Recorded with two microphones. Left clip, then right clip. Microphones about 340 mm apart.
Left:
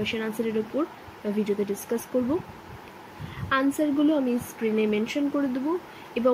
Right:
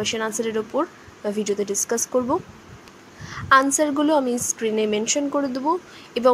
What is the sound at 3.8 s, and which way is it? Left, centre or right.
Speech, right.